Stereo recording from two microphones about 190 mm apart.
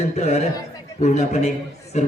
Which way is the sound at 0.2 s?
35° left (ahead or behind).